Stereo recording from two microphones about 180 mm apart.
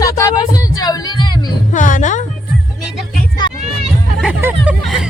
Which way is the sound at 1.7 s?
45° left (ahead or behind).